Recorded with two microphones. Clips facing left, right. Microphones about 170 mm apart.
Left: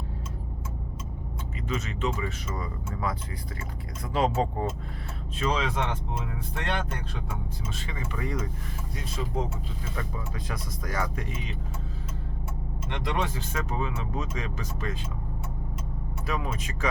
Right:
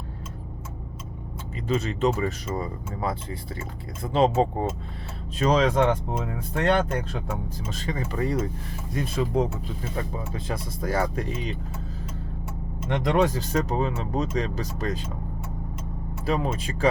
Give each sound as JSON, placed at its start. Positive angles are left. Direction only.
{"t": 1.6, "sound": "speech", "side_deg": -35}
{"t": 5.4, "sound": "speech", "side_deg": -40}
{"t": 9.0, "sound": "speech", "side_deg": -60}
{"t": 9.9, "sound": "speech", "side_deg": -25}
{"t": 12.9, "sound": "speech", "side_deg": -45}
{"t": 16.2, "sound": "speech", "side_deg": -30}